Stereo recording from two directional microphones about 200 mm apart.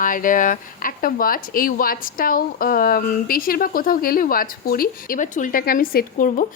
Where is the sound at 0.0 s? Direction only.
40° left (ahead or behind).